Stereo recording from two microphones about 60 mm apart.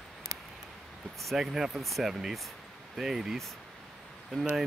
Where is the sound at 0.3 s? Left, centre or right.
Right.